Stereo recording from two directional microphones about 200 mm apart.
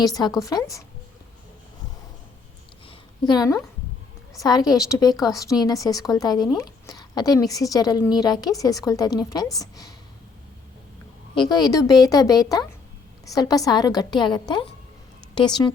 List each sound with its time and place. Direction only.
0.0 s a woman's voice: 20° left (ahead or behind)
3.2 s a woman's voice: 20° left (ahead or behind)
11.3 s a woman's voice: 20° left (ahead or behind)